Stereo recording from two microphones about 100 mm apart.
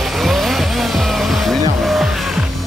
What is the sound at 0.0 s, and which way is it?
Vehicle, centre (ahead or behind).